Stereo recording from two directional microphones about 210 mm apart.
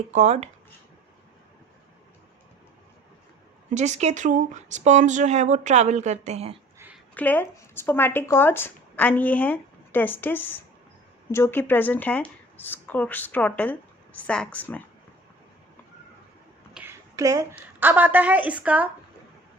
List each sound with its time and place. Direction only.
0.1 s speech: 35° right (ahead or behind)
3.8 s speech: 35° right (ahead or behind)
6.7 s a sound: 10° right (ahead or behind)
7.1 s speech: 10° left (ahead or behind)
16.7 s a woman's voice: 10° right (ahead or behind)